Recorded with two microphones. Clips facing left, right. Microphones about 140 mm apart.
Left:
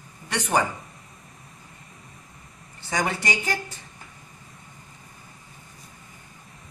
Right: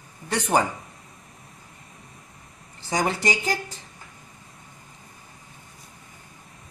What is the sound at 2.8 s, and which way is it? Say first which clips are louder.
Speech: right 2 dB; 30° right (ahead or behind).